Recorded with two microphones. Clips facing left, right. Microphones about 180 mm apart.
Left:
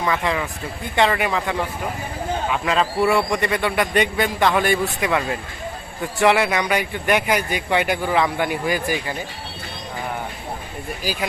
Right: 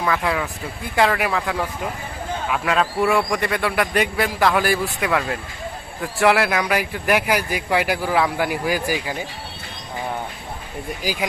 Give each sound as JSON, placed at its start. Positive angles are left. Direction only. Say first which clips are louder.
{"t": 0.0, "sound": "speech", "louder": "even", "side_deg": 0}
{"t": 11.0, "sound": "speech", "louder": "right 1 dB", "side_deg": -15}